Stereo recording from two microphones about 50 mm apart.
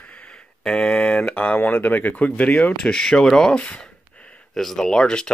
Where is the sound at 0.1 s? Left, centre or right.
Left.